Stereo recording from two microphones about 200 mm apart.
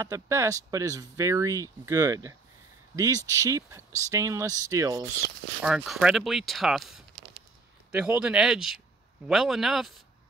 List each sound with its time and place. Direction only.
0.0 s speech: 15° right (ahead or behind)
5.6 s speech: 5° right (ahead or behind)